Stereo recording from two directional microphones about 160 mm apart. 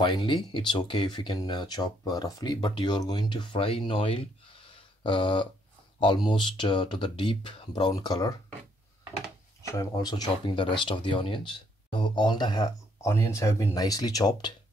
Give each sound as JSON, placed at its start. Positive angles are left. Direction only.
{"t": 0.0, "sound": "speech", "side_deg": 30}
{"t": 5.0, "sound": "a sound", "side_deg": 30}
{"t": 5.9, "sound": "speech", "side_deg": 30}
{"t": 9.6, "sound": "speech", "side_deg": 20}
{"t": 10.3, "sound": "a sound", "side_deg": 30}
{"t": 10.8, "sound": "speech", "side_deg": 30}